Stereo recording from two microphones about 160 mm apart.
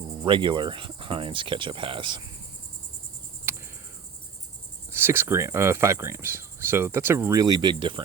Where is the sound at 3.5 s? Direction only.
15° right (ahead or behind).